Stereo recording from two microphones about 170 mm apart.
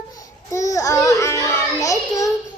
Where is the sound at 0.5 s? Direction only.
20° left (ahead or behind).